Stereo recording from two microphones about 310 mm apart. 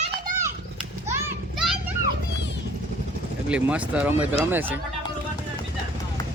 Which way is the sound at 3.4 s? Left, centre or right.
Centre.